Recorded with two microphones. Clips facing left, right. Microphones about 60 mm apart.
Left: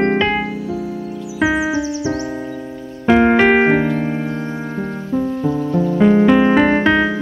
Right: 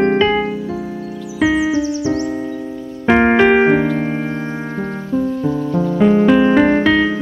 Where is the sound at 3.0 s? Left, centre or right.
Right.